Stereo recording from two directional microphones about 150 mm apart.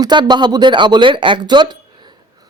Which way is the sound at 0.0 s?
30° right (ahead or behind).